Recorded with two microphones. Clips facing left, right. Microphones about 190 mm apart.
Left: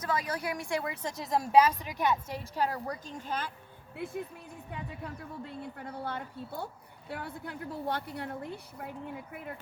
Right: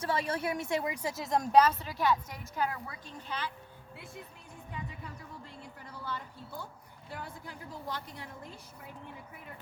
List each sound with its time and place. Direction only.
0.0 s a woman's voice: 30° right (ahead or behind)
1.0 s a woman's voice: centre (ahead or behind); by 3.5 s 45° left (ahead or behind)
3.9 s speech: 60° left (ahead or behind)